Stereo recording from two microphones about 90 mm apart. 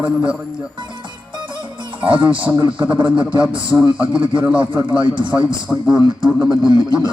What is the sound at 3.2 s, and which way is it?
Speech, 65° right (ahead or behind).